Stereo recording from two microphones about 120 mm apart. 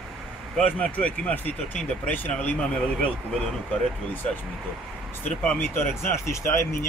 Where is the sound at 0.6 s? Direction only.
10° left (ahead or behind).